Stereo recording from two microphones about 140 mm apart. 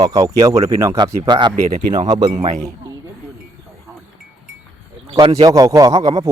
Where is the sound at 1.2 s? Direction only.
35° right (ahead or behind).